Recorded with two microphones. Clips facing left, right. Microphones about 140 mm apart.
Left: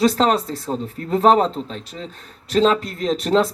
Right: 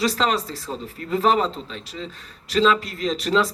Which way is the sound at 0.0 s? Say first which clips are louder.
Left 5 dB; 45° left (ahead or behind).